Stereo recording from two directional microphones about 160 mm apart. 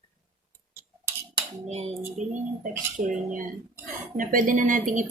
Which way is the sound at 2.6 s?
55° right (ahead or behind).